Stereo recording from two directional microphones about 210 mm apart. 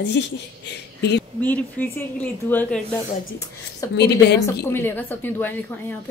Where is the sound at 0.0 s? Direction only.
55° left (ahead or behind).